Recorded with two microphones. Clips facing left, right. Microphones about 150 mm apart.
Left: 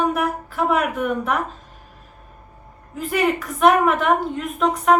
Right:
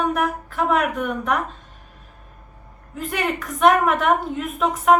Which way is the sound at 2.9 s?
Centre (ahead or behind).